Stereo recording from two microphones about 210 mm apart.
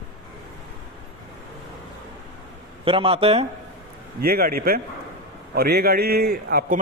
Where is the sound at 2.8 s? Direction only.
25° right (ahead or behind).